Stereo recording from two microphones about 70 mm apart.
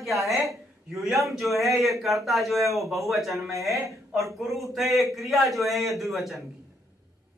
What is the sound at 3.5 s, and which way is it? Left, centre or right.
Speech, right.